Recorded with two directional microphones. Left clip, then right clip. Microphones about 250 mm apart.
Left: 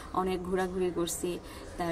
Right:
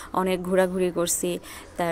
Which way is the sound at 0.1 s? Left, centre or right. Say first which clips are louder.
Right 7 dB; right.